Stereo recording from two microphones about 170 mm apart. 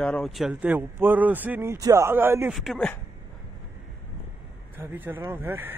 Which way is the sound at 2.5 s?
Centre (ahead or behind).